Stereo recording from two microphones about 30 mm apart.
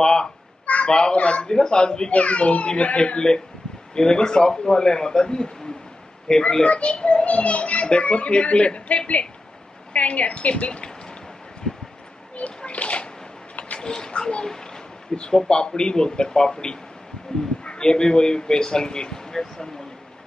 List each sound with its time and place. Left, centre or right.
0.0 s a man's voice: left
1.1 s a child's voice: left
1.5 s a man's voice: left
2.1 s a child's voice: left
3.2 s a man's voice: left
6.4 s a child's voice: left
10.7 s rain: left
12.4 s bathtub: left
13.7 s speech: left
14.4 s a sound: centre
15.3 s a man's voice: left